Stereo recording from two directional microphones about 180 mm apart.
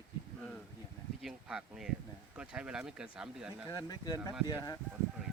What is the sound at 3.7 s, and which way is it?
Speech, 20° left (ahead or behind).